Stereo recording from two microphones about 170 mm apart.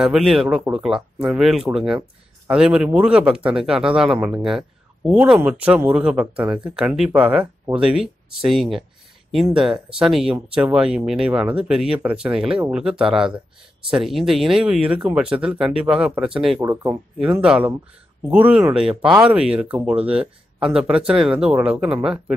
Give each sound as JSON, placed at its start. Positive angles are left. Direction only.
{"t": 0.0, "sound": "speech", "side_deg": 0}
{"t": 16.6, "sound": "speech", "side_deg": -20}
{"t": 17.2, "sound": "speech", "side_deg": -5}